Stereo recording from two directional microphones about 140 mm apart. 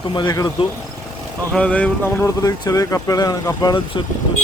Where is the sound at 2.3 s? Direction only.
25° left (ahead or behind).